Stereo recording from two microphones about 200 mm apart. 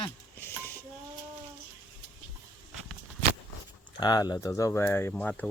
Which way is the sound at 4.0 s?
20° left (ahead or behind).